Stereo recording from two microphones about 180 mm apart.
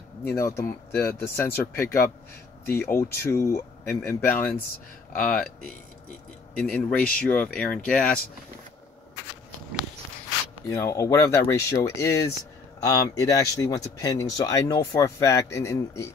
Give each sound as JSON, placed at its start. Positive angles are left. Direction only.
{"t": 0.3, "sound": "speech", "side_deg": 15}
{"t": 10.7, "sound": "speech", "side_deg": 15}